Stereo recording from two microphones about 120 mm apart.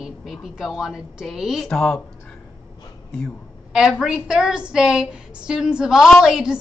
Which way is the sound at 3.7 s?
5° right (ahead or behind).